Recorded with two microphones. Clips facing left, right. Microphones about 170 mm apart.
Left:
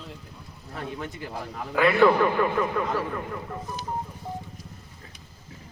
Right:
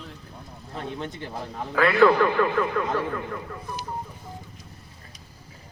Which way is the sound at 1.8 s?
15° left (ahead or behind).